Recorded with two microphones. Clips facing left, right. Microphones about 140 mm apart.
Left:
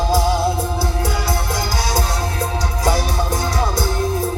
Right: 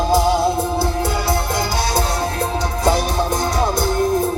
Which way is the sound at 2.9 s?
25° right (ahead or behind).